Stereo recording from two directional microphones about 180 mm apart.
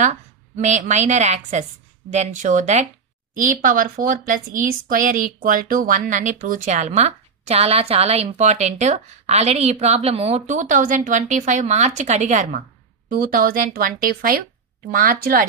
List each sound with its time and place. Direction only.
0.6 s a woman's voice: 40° right (ahead or behind)